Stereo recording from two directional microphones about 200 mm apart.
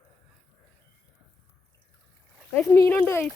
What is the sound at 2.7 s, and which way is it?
Speech, 15° left (ahead or behind).